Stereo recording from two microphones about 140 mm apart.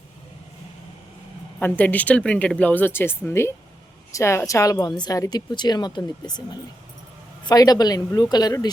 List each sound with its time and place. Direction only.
1.5 s a woman's voice: 15° left (ahead or behind)